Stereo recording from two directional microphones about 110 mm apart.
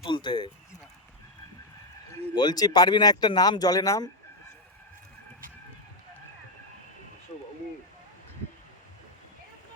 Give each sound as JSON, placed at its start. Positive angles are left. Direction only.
{"t": 0.0, "sound": "speech", "side_deg": 45}
{"t": 2.3, "sound": "speech", "side_deg": 40}